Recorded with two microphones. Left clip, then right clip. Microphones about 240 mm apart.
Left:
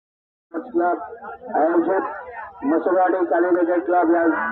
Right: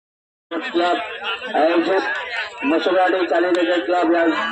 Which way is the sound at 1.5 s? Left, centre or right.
Right.